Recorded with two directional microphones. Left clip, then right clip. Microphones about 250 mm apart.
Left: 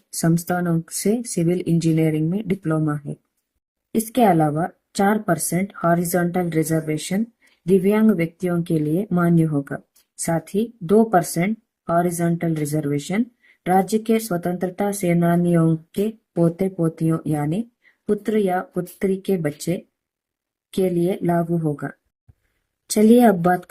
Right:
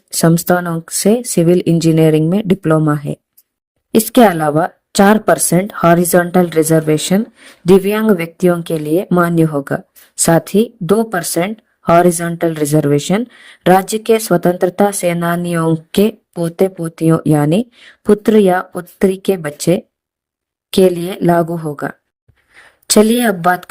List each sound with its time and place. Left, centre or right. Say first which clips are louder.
0.2 s speech: right 10 dB; right